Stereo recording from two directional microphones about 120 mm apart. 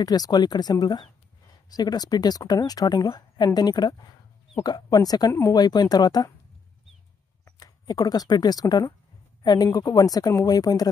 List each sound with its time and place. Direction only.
0.0 s speech: 35° left (ahead or behind)
7.5 s speech: 30° left (ahead or behind)